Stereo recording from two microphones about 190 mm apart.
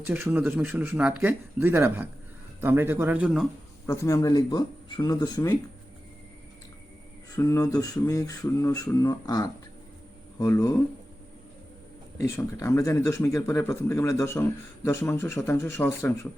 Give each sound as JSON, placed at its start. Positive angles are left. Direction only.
{"t": 0.0, "sound": "speech", "side_deg": -10}
{"t": 3.8, "sound": "speech", "side_deg": 15}
{"t": 7.3, "sound": "a man's voice", "side_deg": 15}
{"t": 12.1, "sound": "a man's voice", "side_deg": 15}